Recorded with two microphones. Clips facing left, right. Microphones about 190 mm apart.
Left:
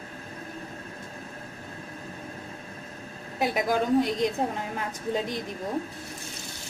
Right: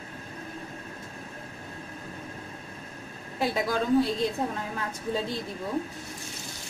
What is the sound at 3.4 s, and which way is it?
A woman's voice, 15° left (ahead or behind).